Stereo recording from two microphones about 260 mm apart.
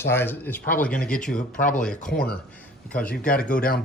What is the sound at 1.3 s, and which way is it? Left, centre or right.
Speech, left.